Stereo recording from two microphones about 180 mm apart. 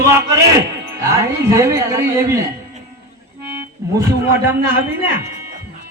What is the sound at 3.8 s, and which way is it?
Speech, 15° right (ahead or behind).